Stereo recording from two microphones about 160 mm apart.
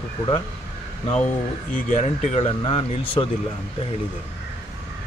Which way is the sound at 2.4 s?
35° left (ahead or behind).